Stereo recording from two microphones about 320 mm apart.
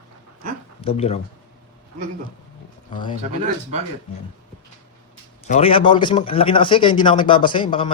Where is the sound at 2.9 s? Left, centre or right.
Centre.